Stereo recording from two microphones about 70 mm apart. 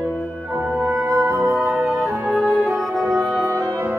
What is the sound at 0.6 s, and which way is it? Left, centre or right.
Music, right.